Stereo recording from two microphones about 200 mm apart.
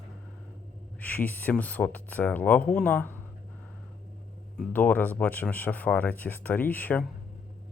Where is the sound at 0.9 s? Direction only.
10° left (ahead or behind).